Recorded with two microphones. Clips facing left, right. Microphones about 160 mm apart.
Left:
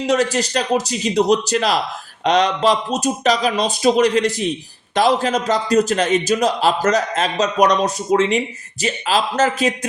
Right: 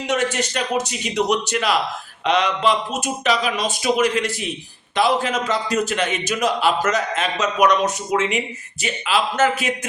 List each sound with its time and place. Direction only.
0.0 s a man's voice: 35° left (ahead or behind)